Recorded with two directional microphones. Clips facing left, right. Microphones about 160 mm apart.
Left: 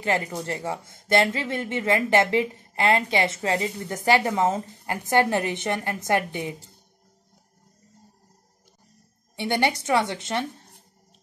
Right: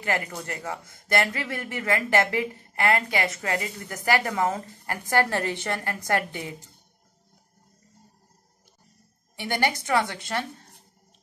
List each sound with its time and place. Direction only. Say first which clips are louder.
0.0 s speech: left 3 dB; 25° left (ahead or behind)
9.4 s speech: left 3 dB; 25° left (ahead or behind)